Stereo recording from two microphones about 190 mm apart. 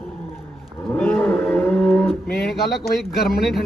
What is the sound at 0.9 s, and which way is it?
Livestock, 5° left (ahead or behind).